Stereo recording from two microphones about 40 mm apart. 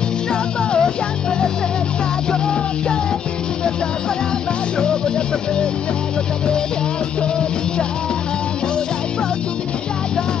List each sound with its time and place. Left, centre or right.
0.3 s music: left
4.7 s music: left